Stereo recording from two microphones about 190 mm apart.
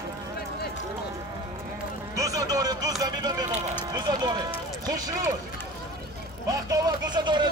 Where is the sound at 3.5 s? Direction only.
35° right (ahead or behind).